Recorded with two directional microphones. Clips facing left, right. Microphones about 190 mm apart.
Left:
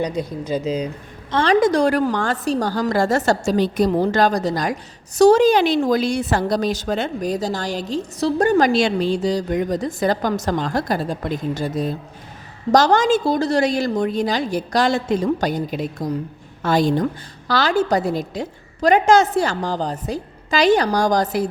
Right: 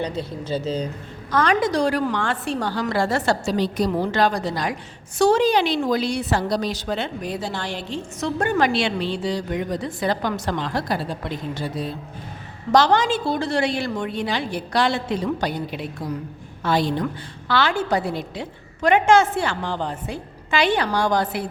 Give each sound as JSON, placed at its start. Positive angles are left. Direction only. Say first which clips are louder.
{"t": 0.0, "sound": "speech", "louder": "left 4 dB", "side_deg": 15}
{"t": 1.3, "sound": "a woman's voice", "louder": "left 2 dB", "side_deg": 30}
{"t": 1.6, "sound": "a woman's voice", "louder": "left 4 dB", "side_deg": 50}